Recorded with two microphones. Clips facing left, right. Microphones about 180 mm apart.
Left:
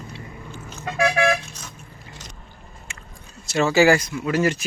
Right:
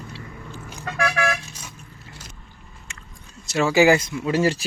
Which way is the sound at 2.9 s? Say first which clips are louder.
Left 2 dB; 10° left (ahead or behind).